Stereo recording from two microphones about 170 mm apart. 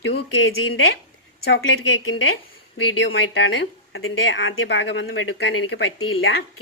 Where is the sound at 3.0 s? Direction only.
90° left.